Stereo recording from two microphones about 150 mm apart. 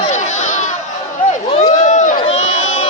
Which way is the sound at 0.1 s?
50° left (ahead or behind).